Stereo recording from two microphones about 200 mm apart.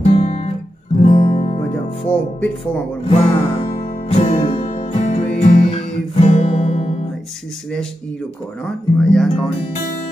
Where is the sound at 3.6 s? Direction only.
30° left (ahead or behind).